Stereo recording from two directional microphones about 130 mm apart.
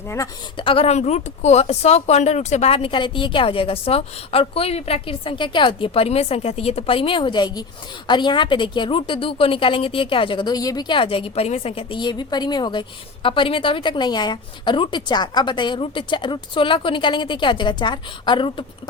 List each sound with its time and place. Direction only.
0.5 s a woman's voice: 45° left (ahead or behind)